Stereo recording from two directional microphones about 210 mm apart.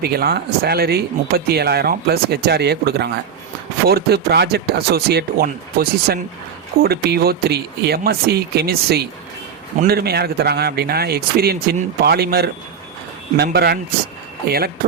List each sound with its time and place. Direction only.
0.0 s speech: 50° right (ahead or behind)